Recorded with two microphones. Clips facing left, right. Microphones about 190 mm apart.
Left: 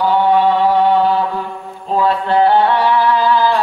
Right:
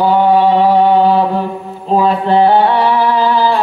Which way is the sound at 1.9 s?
20° right (ahead or behind).